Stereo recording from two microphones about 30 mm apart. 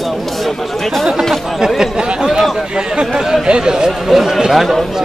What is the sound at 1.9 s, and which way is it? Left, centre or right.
Speech, right.